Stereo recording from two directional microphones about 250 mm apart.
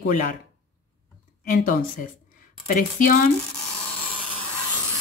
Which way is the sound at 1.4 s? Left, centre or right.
Left.